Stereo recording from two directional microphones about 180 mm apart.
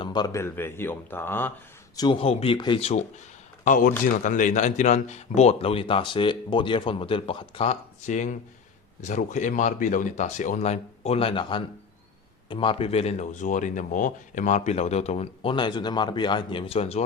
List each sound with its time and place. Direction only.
0.0 s speech: 25° left (ahead or behind)
2.0 s speech: 30° left (ahead or behind)
3.6 s speech: 45° left (ahead or behind)